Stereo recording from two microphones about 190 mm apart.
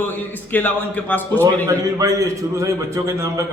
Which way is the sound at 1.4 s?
15° right (ahead or behind).